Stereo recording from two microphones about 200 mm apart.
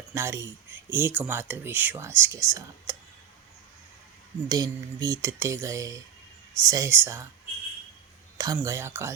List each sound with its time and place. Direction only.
0.1 s speech: 15° right (ahead or behind)
4.4 s speech: 20° right (ahead or behind)
8.4 s speech: 15° right (ahead or behind)